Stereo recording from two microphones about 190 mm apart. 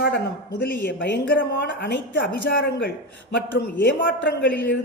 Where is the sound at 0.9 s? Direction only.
70° left (ahead or behind).